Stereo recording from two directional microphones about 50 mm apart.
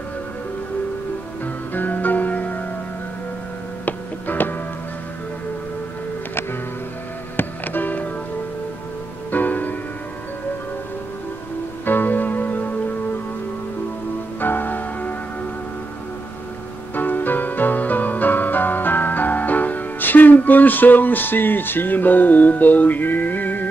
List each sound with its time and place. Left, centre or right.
1.4 s music: left
3.8 s music: left
7.3 s music: left
9.3 s music: left
11.8 s music: left
14.4 s music: left
16.9 s music: left